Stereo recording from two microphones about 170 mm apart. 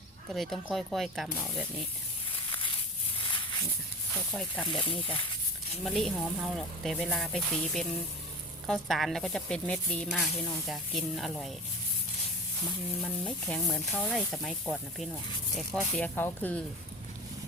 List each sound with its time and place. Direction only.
0.3 s speech: centre (ahead or behind)
2.3 s a sound: 30° left (ahead or behind)
4.1 s speech: 5° left (ahead or behind)
4.6 s speech: 30° left (ahead or behind)
5.8 s speech: centre (ahead or behind)
13.0 s speech: 5° left (ahead or behind)